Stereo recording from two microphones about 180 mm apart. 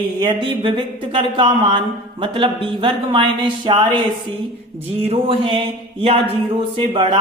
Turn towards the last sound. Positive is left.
turn(degrees=-30)  # may be behind; listen again after turning